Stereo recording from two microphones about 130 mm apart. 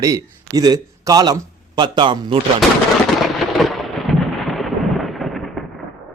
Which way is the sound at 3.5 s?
Centre (ahead or behind).